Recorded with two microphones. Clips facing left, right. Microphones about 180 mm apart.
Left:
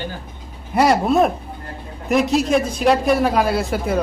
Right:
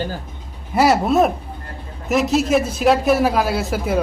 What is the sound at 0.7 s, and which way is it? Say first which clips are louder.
A man's voice: even; 5° right (ahead or behind).